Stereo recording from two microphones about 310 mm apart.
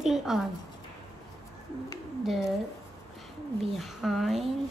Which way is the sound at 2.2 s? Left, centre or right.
Centre.